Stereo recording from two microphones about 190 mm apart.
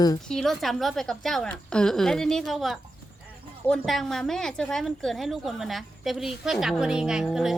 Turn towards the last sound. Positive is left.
turn(degrees=0)  # may be behind; listen again after turning